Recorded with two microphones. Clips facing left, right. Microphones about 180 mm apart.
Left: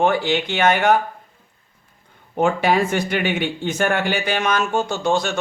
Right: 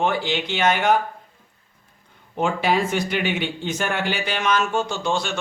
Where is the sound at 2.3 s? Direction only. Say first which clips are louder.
Left 3 dB; 50° left (ahead or behind).